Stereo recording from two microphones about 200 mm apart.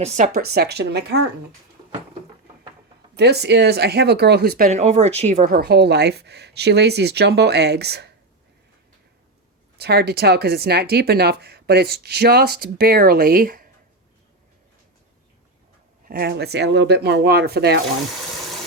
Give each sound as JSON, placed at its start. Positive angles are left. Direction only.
{"t": 0.3, "sound": "speech", "side_deg": -50}
{"t": 3.2, "sound": "speech", "side_deg": -55}
{"t": 9.7, "sound": "speech", "side_deg": -55}
{"t": 16.0, "sound": "speech", "side_deg": -50}